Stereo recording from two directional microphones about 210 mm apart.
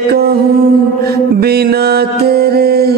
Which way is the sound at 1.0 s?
50° right (ahead or behind).